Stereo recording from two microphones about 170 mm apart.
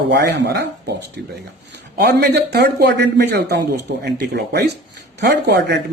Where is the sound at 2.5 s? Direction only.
80° right.